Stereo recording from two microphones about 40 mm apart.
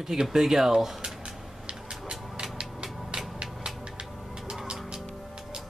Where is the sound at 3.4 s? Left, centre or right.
Right.